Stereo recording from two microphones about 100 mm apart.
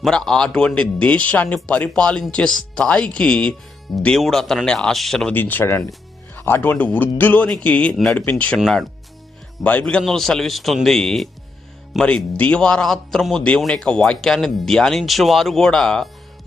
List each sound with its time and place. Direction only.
0.0 s speech: 5° left (ahead or behind)
5.3 s a man's voice: 20° left (ahead or behind)
8.5 s speech: centre (ahead or behind)
9.6 s speech: 10° left (ahead or behind)